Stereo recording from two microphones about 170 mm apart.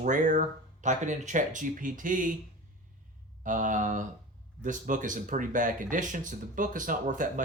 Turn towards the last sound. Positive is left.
turn(degrees=-50)  # may be behind; listen again after turning